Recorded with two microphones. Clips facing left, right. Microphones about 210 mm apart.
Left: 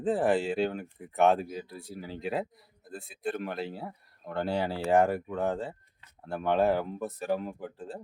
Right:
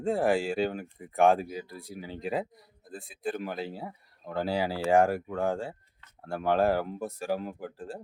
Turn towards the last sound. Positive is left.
turn(degrees=0)  # may be behind; listen again after turning